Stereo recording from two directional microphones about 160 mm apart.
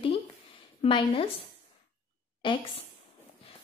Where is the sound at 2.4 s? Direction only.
30° left (ahead or behind).